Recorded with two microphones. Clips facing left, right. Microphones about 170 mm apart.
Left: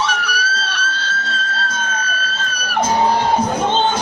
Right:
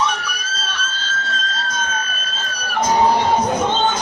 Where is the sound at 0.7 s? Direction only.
70° left (ahead or behind).